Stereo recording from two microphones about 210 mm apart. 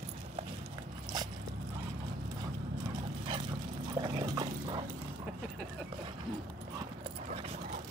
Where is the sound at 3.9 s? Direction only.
20° right (ahead or behind).